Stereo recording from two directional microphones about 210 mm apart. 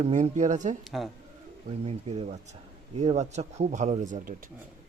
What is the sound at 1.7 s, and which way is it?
A man's voice, 30° right (ahead or behind).